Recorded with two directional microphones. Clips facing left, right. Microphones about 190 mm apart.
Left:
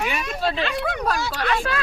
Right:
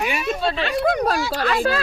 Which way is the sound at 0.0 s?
10° right (ahead or behind).